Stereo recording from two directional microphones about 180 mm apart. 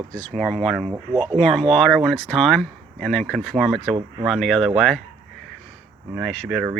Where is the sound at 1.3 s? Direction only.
Centre (ahead or behind).